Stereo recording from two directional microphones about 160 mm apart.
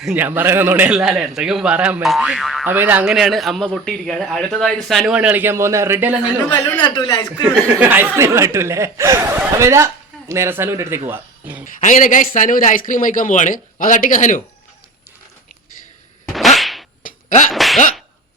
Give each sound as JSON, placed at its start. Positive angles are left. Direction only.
{"t": 0.0, "sound": "a man's voice", "side_deg": -10}
{"t": 2.6, "sound": "a man's voice", "side_deg": -10}
{"t": 6.8, "sound": "speech", "side_deg": 30}
{"t": 7.8, "sound": "speech", "side_deg": -10}
{"t": 11.6, "sound": "a man's voice", "side_deg": 50}
{"t": 16.3, "sound": "whip", "side_deg": 0}
{"t": 17.0, "sound": "a sound", "side_deg": 55}
{"t": 17.5, "sound": "a sound", "side_deg": 0}